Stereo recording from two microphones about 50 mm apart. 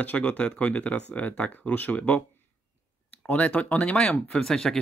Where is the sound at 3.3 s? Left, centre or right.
Left; by 4.8 s centre.